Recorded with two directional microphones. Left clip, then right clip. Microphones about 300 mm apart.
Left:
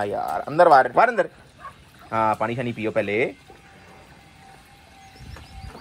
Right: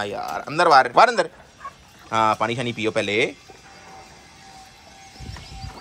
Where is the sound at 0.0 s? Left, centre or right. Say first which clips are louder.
Left 2 dB; centre.